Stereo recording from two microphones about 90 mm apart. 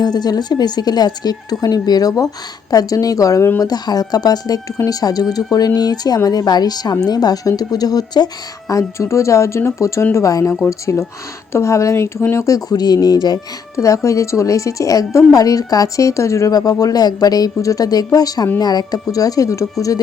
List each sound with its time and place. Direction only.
0.0 s speech: 50° left (ahead or behind)
8.7 s a woman's voice: 35° left (ahead or behind)
13.7 s a woman's voice: 35° left (ahead or behind)